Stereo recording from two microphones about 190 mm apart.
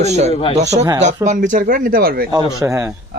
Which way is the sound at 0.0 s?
35° right (ahead or behind).